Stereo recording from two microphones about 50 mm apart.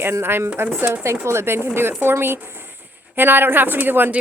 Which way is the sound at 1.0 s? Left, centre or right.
Right.